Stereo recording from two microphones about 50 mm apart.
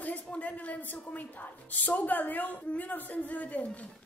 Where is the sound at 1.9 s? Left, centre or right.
Left.